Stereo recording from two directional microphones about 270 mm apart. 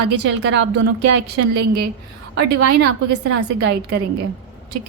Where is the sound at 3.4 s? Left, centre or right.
Right.